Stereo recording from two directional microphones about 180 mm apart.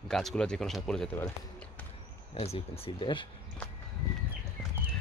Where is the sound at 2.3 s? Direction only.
35° left (ahead or behind).